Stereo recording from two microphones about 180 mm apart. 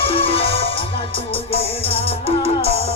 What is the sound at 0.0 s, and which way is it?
Music, 30° left (ahead or behind).